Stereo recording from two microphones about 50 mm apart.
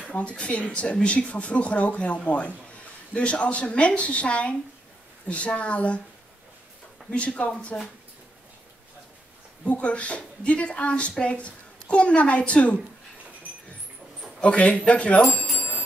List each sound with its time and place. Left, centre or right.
0.0 s speech: left
7.1 s speech: left
9.7 s speech: left
14.4 s speech: left